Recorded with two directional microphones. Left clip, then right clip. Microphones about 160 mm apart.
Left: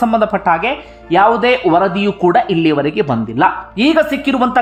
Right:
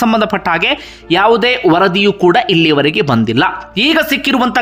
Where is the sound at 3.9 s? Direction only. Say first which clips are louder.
Even; 10° right (ahead or behind).